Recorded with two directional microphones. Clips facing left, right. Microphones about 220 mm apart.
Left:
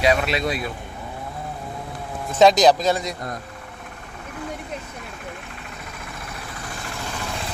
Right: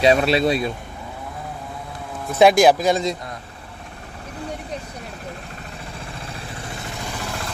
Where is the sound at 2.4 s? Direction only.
10° right (ahead or behind).